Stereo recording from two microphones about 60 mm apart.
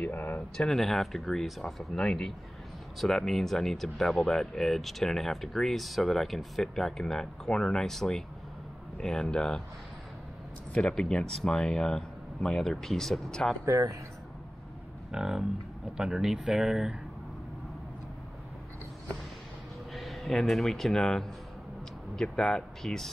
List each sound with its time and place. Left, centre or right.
0.0 s a sound: left
0.6 s speech: centre
10.7 s speech: centre
13.7 s speech: right
15.0 s speech: centre
19.9 s speech: centre